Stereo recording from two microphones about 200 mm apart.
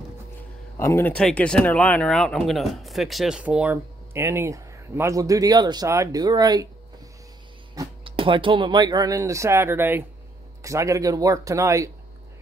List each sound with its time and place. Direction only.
0.7 s speech: 10° left (ahead or behind); by 6.7 s 20° right (ahead or behind)
7.7 s speech: 20° right (ahead or behind)